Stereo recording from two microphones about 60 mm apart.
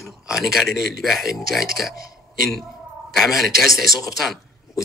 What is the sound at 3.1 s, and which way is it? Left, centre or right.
Speech, centre.